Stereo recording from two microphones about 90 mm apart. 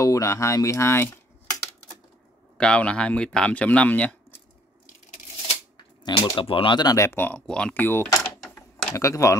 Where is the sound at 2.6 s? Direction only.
10° left (ahead or behind).